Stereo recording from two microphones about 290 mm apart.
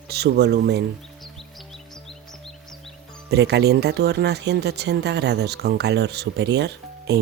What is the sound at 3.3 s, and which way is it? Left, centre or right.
Speech, right.